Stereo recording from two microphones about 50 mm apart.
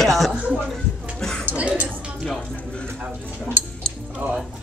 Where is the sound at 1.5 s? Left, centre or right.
Right.